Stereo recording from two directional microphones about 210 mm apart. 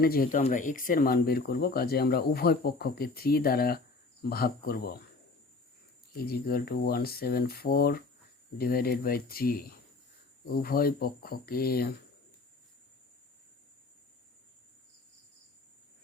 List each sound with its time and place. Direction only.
0.0 s speech: 45° left (ahead or behind)
6.1 s speech: 45° left (ahead or behind)